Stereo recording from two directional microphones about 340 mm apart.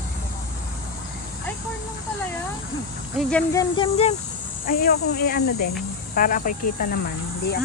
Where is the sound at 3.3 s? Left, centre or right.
Centre.